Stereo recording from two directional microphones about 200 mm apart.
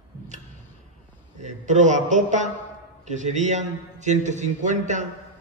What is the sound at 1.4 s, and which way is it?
A man's voice, 40° right (ahead or behind).